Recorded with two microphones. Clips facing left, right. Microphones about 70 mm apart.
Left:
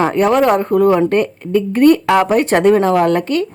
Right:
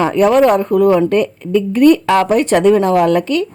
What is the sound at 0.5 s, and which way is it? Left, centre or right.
A woman's voice, left.